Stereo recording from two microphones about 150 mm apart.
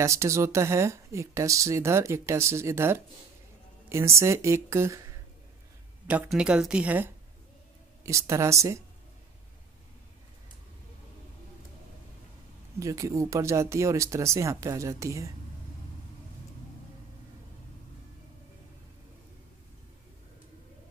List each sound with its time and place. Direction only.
0.0 s speech: 20° right (ahead or behind)
6.2 s speech: 5° right (ahead or behind)
8.0 s speech: 20° right (ahead or behind)
12.7 s speech: 20° right (ahead or behind)